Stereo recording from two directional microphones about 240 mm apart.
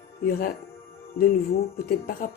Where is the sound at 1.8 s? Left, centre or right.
Left.